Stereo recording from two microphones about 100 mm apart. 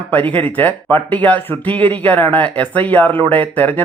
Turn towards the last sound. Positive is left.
turn(degrees=15)  # may be behind; listen again after turning